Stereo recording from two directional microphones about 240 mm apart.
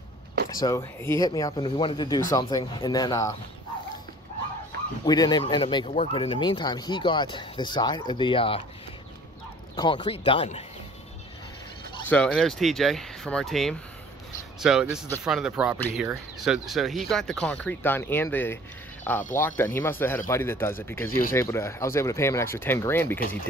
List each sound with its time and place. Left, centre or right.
0.6 s speech: centre
5.0 s speech: centre
9.8 s speech: centre
12.1 s speech: centre